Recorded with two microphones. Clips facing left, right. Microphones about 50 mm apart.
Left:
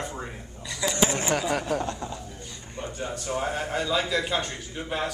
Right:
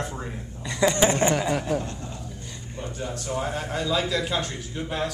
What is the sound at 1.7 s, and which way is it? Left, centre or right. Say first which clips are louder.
Speech: even; left.